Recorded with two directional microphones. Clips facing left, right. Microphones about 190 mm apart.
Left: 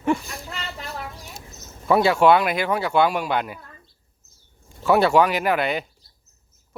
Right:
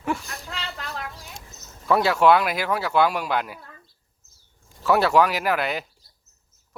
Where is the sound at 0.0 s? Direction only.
Centre (ahead or behind).